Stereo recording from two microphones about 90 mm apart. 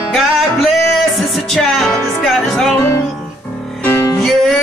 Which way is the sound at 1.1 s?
Centre (ahead or behind).